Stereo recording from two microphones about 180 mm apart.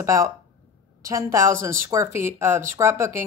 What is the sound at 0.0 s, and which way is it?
A woman's voice, 15° right (ahead or behind).